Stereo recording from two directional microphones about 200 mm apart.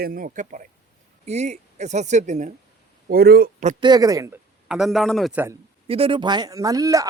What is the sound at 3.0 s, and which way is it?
Speech, 50° right (ahead or behind).